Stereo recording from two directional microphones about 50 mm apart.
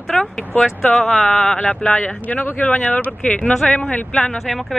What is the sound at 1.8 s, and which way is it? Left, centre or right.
Speech, left.